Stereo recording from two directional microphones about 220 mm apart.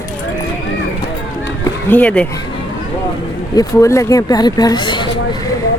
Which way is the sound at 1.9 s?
5° left (ahead or behind).